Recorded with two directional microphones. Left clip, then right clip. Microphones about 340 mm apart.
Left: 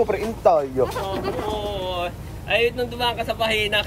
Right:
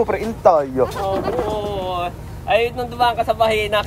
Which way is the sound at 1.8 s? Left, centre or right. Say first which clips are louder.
Right 3 dB; centre.